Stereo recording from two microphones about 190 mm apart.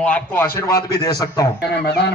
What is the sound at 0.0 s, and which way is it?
A man's voice, 10° left (ahead or behind).